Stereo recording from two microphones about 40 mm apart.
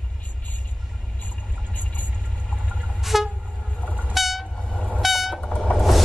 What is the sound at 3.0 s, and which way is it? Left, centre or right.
Train, centre.